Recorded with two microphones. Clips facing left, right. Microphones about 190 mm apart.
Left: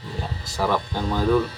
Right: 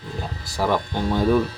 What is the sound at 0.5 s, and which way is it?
Speech, 10° right (ahead or behind).